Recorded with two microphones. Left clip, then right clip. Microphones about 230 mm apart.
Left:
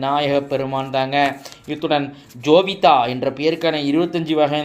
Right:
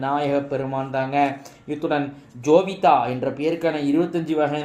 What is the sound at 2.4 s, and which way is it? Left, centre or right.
A man's voice, left.